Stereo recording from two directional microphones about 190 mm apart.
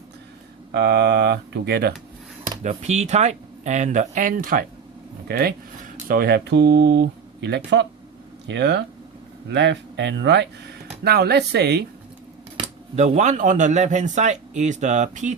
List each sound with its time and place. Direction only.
0.7 s speech: 60° right (ahead or behind)
2.6 s speech: 35° right (ahead or behind); by 11.9 s 60° right (ahead or behind)
12.6 s speech: 35° right (ahead or behind)